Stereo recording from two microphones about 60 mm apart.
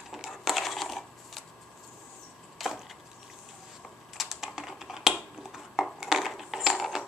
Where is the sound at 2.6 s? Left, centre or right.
Centre.